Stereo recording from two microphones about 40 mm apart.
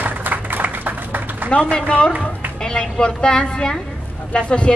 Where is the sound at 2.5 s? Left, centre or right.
Centre.